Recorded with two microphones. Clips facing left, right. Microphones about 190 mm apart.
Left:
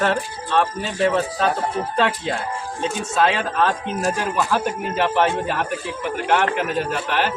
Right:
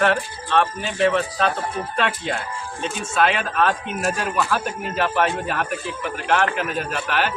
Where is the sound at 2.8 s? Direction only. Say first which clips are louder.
Left 1 dB; 25° left (ahead or behind).